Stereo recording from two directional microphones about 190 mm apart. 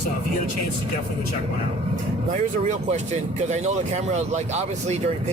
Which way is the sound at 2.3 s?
40° right (ahead or behind).